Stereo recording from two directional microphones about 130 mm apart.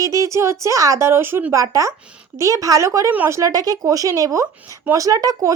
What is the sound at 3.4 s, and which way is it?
Speech, 25° right (ahead or behind).